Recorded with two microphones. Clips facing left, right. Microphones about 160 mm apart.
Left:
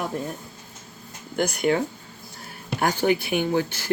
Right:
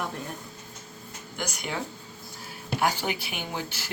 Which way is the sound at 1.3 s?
60° left (ahead or behind).